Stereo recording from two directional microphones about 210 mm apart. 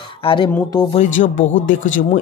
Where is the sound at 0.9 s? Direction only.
35° left (ahead or behind).